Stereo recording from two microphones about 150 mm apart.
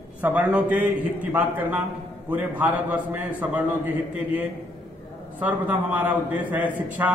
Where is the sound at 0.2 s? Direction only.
10° right (ahead or behind).